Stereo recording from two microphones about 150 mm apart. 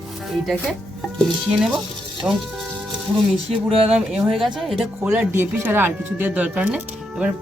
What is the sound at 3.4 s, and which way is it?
Speech, 40° right (ahead or behind).